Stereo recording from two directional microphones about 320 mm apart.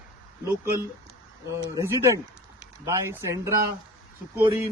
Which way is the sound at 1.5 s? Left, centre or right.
Centre.